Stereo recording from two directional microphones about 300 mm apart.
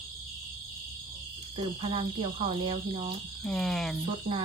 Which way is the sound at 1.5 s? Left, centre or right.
Centre.